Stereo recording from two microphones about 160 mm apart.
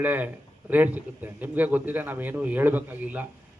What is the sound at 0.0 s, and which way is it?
A man's voice, 10° right (ahead or behind).